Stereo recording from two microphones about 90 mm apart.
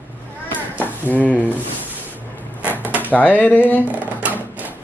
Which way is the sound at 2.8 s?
20° right (ahead or behind).